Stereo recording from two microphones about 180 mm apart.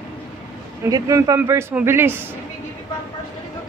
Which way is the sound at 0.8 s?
20° right (ahead or behind).